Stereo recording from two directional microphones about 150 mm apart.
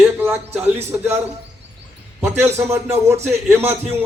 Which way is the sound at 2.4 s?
15° right (ahead or behind).